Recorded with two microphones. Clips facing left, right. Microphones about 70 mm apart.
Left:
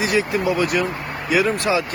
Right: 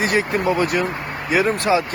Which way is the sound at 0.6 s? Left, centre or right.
Right.